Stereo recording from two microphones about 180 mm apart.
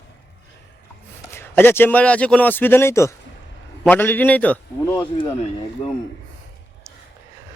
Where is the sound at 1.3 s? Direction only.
15° left (ahead or behind).